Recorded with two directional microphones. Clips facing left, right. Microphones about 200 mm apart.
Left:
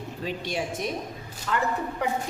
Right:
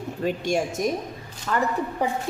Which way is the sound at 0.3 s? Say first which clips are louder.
Right 6 dB; 45° right (ahead or behind).